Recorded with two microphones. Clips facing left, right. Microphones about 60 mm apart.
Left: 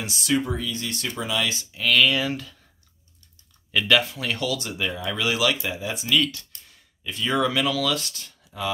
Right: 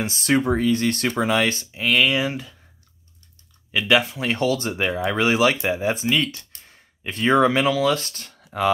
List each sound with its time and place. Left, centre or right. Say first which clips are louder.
0.0 s speech: right 4 dB; right
1.7 s speech: left 3 dB; right
3.7 s speech: right 2 dB; centre; by 8.6 s right